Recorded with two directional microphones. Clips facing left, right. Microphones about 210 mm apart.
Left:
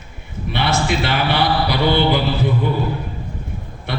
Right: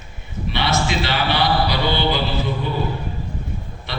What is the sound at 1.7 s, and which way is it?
A man's voice, 55° left (ahead or behind).